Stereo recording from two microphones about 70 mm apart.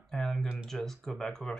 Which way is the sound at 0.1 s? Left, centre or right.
Centre.